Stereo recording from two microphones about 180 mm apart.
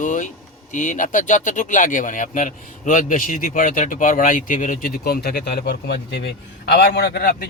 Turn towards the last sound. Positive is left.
turn(degrees=55)  # may be behind; listen again after turning